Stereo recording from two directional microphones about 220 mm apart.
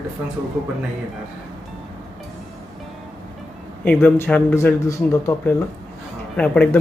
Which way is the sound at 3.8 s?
10° left (ahead or behind).